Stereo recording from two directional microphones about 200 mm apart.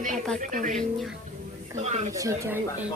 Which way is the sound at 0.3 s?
40° right (ahead or behind).